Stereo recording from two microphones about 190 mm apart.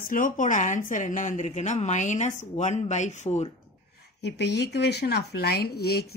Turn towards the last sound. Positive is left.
turn(degrees=55)  # may be behind; listen again after turning